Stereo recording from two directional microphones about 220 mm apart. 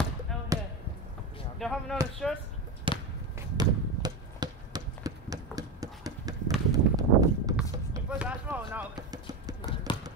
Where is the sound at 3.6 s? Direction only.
20° right (ahead or behind).